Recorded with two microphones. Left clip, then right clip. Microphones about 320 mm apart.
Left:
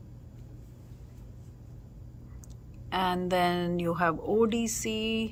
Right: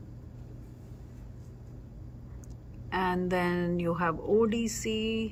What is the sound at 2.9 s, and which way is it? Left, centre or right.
A woman's voice, centre.